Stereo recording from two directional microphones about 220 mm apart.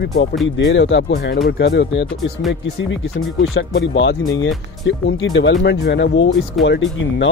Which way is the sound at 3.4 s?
55° left (ahead or behind).